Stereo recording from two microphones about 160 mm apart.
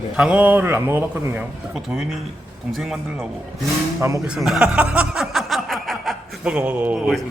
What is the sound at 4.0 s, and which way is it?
Speech, 20° right (ahead or behind).